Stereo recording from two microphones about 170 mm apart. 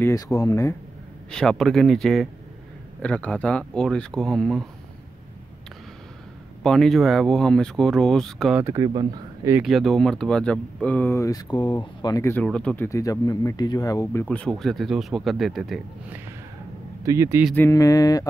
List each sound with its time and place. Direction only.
0.0 s speech: 20° left (ahead or behind)
1.3 s speech: 5° left (ahead or behind)
6.6 s speech: 5° left (ahead or behind)
8.6 s speech: 25° right (ahead or behind)
9.6 s speech: centre (ahead or behind); by 12.4 s 15° left (ahead or behind)
12.4 s speech: 5° left (ahead or behind); by 14.2 s 20° left (ahead or behind)
14.2 s speech: 5° left (ahead or behind)
17.0 s a man's voice: 20° right (ahead or behind)
17.6 s speech: 20° left (ahead or behind)